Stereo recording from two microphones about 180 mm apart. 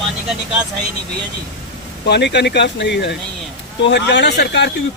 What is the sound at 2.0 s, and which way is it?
Speech, 70° left (ahead or behind).